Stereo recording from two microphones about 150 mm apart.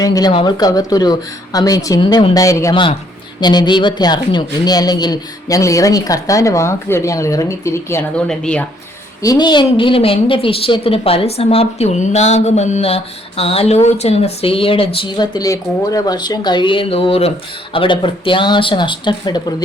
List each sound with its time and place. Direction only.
0.0 s speech: 25° left (ahead or behind)
8.1 s speech: 5° left (ahead or behind)
9.2 s a woman's voice: 25° left (ahead or behind)